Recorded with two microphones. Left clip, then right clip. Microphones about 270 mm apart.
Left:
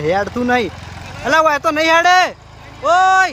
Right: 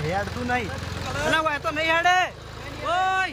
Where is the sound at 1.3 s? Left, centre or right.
Centre.